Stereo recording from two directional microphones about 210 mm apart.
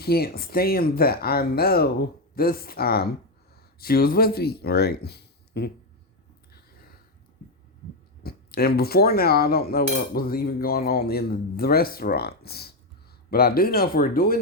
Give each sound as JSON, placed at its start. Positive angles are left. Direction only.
{"t": 0.0, "sound": "cutlery", "side_deg": 45}
{"t": 8.2, "sound": "cutlery", "side_deg": 45}